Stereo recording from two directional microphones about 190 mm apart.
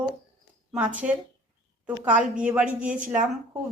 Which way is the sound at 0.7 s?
5° right (ahead or behind).